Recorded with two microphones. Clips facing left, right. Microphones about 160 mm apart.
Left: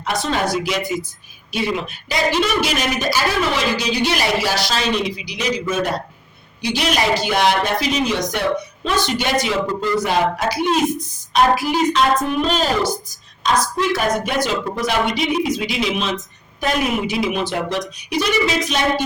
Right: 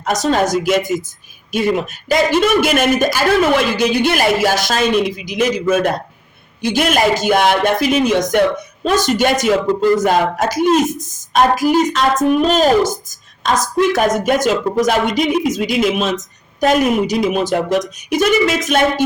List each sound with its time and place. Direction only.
0.0 s a woman's voice: 45° right (ahead or behind)